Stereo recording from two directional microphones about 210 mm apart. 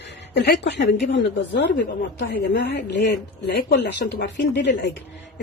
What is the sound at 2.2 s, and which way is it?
Speech, 50° left (ahead or behind).